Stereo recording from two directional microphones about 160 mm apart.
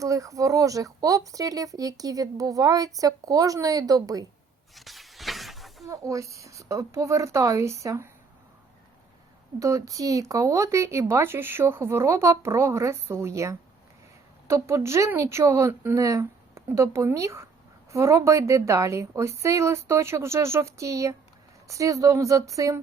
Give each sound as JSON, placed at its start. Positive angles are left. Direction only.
{"t": 0.0, "sound": "speech", "side_deg": -20}
{"t": 4.7, "sound": "a sound", "side_deg": 0}
{"t": 5.8, "sound": "speech", "side_deg": -20}
{"t": 9.6, "sound": "speech", "side_deg": -20}